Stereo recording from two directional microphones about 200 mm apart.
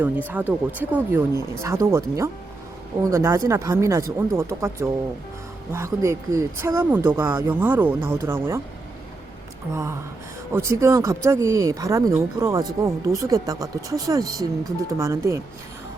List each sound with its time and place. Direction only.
0.3 s speech: 10° right (ahead or behind)
9.7 s speech: 15° right (ahead or behind)